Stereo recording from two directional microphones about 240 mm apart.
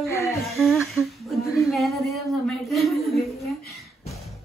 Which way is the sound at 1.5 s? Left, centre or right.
Centre.